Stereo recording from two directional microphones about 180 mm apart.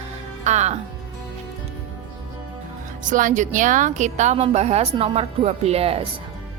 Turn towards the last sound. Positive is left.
turn(degrees=-35)  # may be behind; listen again after turning